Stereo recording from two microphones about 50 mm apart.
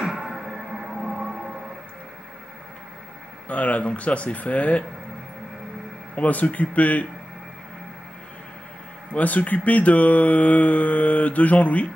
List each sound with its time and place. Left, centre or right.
0.0 s music: centre
3.4 s speech: left
6.1 s speech: left
9.1 s speech: left